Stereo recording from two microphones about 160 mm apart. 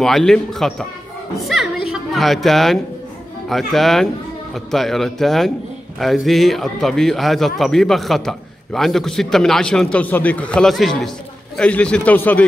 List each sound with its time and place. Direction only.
0.0 s a woman's voice: centre (ahead or behind)